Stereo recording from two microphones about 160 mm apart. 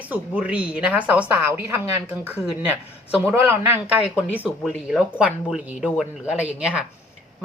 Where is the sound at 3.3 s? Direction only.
15° right (ahead or behind).